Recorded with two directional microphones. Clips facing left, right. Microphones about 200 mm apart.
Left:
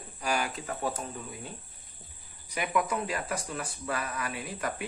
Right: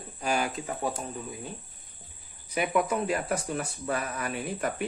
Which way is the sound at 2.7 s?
30° right (ahead or behind).